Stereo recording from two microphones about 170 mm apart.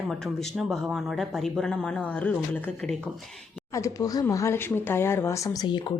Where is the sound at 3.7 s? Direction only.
20° left (ahead or behind).